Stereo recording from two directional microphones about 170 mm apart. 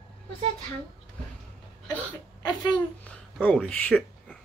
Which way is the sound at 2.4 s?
25° left (ahead or behind).